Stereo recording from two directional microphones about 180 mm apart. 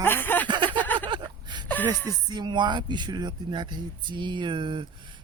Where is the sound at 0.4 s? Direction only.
25° right (ahead or behind).